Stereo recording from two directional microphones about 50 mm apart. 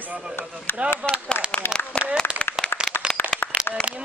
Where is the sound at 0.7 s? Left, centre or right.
Left.